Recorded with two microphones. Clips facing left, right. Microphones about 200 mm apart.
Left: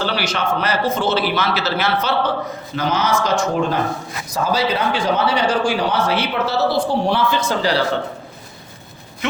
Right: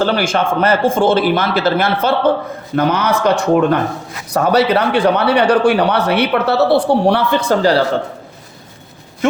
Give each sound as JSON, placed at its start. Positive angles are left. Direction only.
{"t": 0.0, "sound": "a man's voice", "side_deg": -50}